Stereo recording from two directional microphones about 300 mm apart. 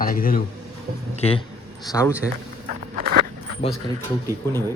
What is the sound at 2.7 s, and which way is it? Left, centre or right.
Walk, right.